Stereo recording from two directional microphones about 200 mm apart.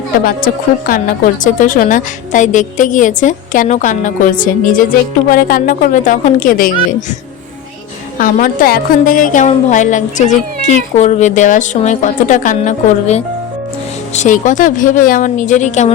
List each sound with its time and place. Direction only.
0.3 s a woman's voice: 45° left (ahead or behind)
8.2 s a woman's voice: 45° left (ahead or behind)